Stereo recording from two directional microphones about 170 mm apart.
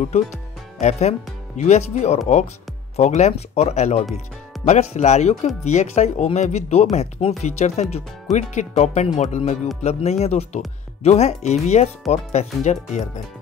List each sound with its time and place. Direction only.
0.7 s speech: 40° left (ahead or behind)